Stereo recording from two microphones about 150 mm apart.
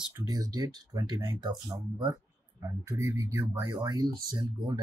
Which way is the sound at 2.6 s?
20° right (ahead or behind).